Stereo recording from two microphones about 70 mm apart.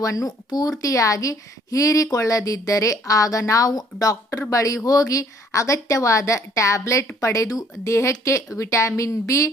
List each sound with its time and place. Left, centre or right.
0.0 s a woman's voice: left